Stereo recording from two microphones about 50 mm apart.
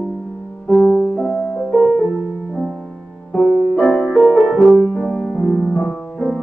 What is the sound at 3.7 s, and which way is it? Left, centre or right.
Music, centre.